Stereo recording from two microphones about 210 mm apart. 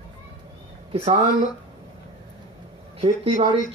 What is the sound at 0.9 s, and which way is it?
Speech, 30° right (ahead or behind).